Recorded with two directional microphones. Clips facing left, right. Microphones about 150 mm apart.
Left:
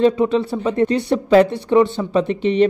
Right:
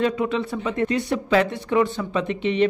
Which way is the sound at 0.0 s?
30° left (ahead or behind).